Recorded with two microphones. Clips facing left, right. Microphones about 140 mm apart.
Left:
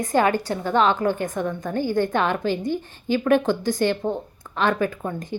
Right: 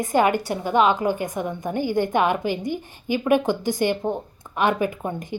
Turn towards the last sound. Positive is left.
turn(degrees=-20)  # may be behind; listen again after turning